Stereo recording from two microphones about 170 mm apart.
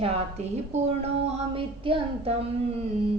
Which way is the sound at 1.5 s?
30° right (ahead or behind).